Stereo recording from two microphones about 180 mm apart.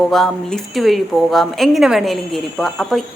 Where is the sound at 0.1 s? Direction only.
Centre (ahead or behind).